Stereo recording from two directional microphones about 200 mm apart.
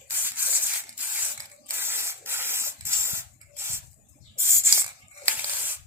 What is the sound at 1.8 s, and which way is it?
Spray, 10° right (ahead or behind).